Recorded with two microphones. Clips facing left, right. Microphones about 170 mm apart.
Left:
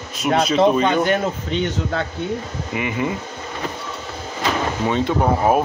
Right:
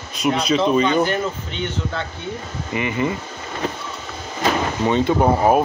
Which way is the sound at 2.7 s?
5° left (ahead or behind).